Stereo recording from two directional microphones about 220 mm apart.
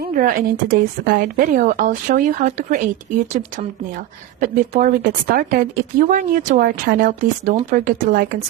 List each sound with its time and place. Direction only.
0.1 s a woman's voice: 40° right (ahead or behind)
4.4 s a woman's voice: 35° right (ahead or behind)